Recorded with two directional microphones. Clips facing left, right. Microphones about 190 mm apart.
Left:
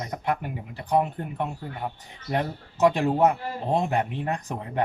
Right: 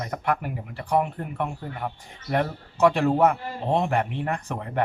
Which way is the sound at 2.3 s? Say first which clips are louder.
Right 2 dB; 20° left (ahead or behind).